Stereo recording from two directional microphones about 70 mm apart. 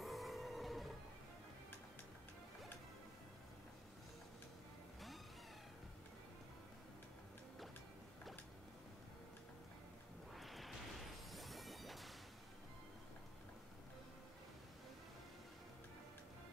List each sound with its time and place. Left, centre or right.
0.0 s music: centre
10.3 s thunder: centre
11.3 s music: centre